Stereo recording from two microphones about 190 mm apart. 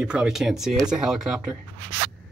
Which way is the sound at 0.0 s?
5° right (ahead or behind).